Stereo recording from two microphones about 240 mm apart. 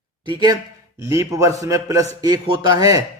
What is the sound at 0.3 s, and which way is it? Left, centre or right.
A man's voice, centre.